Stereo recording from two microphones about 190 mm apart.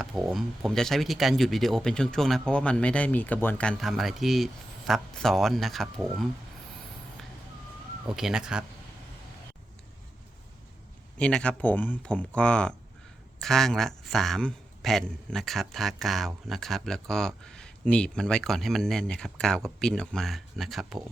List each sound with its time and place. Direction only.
0.0 s a man's voice: centre (ahead or behind)
8.0 s a man's voice: centre (ahead or behind)
11.2 s a man's voice: 5° left (ahead or behind)